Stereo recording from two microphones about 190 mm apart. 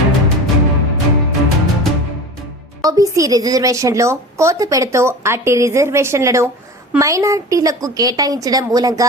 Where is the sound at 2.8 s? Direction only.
15° right (ahead or behind).